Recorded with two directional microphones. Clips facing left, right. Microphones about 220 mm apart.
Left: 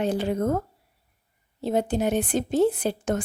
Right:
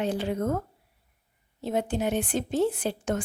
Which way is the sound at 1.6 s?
35° left (ahead or behind).